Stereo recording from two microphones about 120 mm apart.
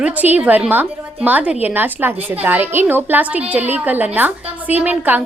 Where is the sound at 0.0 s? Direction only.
15° right (ahead or behind).